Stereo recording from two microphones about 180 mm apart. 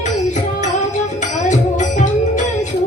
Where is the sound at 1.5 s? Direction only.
45° left (ahead or behind).